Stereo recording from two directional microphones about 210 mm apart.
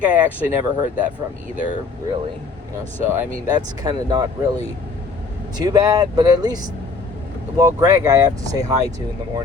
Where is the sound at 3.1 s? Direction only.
15° right (ahead or behind).